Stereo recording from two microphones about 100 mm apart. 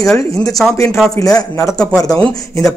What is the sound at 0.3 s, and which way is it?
Speech, 35° left (ahead or behind).